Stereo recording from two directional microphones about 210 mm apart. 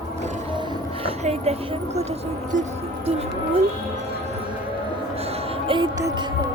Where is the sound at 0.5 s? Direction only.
20° right (ahead or behind).